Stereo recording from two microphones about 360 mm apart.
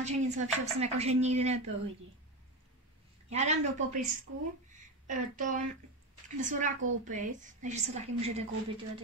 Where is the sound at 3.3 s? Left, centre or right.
Centre.